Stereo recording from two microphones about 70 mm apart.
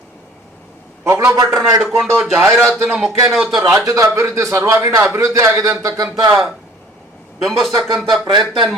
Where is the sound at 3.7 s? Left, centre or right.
Right.